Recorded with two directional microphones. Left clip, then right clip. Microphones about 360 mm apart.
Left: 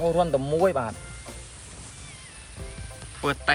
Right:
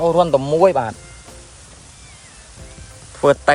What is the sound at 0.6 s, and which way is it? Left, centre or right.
Speech, right.